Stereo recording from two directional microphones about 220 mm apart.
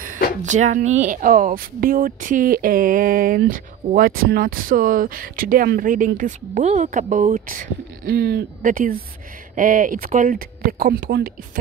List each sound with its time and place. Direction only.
0.0 s speech: 35° right (ahead or behind)